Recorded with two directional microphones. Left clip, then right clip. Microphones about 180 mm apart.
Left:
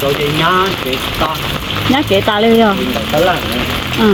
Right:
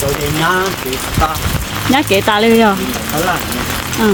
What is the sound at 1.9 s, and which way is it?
Speech, 30° right (ahead or behind).